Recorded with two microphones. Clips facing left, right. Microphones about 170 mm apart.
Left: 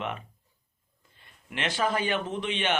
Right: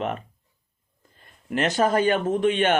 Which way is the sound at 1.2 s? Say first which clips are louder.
Right 9 dB; 45° right (ahead or behind).